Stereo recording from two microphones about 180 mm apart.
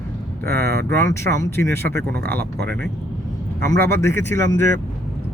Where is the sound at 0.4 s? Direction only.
60° right (ahead or behind).